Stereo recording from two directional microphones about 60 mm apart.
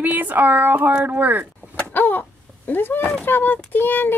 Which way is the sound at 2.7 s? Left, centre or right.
Left.